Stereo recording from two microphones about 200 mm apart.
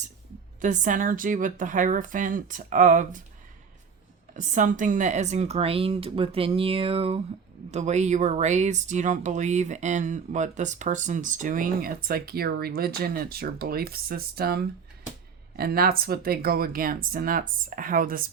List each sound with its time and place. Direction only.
0.6 s speech: 40° right (ahead or behind)
4.4 s speech: 40° right (ahead or behind)